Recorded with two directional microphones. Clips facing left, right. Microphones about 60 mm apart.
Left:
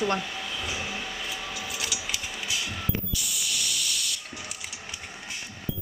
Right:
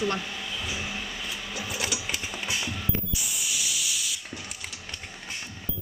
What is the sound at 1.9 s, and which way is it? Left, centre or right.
Sewing machine, right.